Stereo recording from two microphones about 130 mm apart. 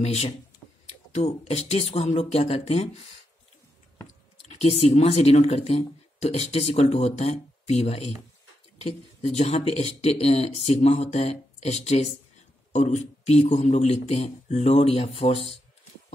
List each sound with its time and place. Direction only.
0.0 s speech: 55° left (ahead or behind)
4.5 s speech: 50° left (ahead or behind)